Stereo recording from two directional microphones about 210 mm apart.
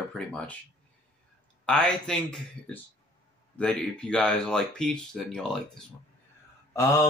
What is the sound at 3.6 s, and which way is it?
Speech, 5° left (ahead or behind).